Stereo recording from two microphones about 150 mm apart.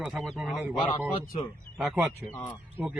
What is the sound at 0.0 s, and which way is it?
A man's voice, centre (ahead or behind).